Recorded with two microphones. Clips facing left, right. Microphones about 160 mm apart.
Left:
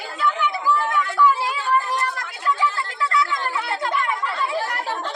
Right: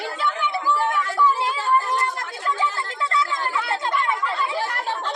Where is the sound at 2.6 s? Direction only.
25° right (ahead or behind).